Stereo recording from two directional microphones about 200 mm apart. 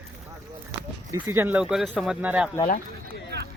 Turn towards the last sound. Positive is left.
turn(degrees=55)  # may be behind; listen again after turning